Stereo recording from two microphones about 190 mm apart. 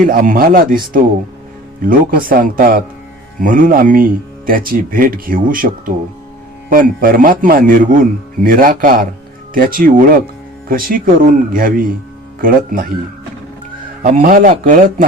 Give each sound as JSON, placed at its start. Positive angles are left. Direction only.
{"t": 0.0, "sound": "speech", "side_deg": -45}
{"t": 14.0, "sound": "speech", "side_deg": -45}